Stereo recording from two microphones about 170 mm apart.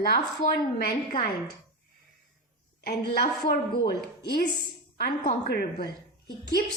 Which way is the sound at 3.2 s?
65° left (ahead or behind).